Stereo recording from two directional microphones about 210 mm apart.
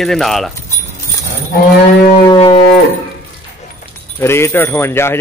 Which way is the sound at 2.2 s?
25° left (ahead or behind).